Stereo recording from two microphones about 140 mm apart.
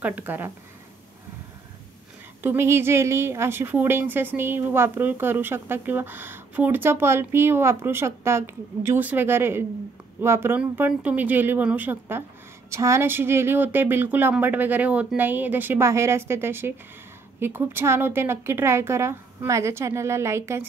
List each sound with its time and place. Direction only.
0.0 s a woman's voice: 10° right (ahead or behind)
2.4 s a woman's voice: 15° right (ahead or behind)